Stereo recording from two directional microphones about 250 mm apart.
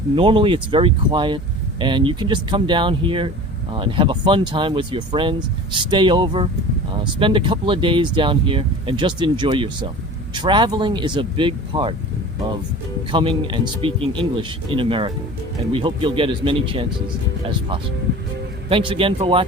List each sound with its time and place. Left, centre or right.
0.2 s speech: right
13.1 s speech: centre
18.7 s speech: right